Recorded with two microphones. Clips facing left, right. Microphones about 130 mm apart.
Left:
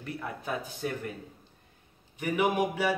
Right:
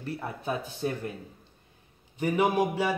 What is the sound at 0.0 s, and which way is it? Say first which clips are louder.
Speech: right 3 dB; 25° right (ahead or behind).